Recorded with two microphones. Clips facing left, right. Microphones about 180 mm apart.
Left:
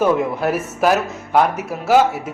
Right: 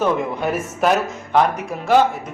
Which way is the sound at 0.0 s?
5° left (ahead or behind).